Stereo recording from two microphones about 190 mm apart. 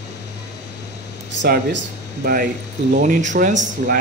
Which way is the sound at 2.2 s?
55° right (ahead or behind).